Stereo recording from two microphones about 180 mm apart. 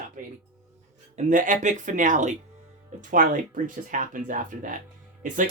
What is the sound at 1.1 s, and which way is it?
Speech, 45° right (ahead or behind).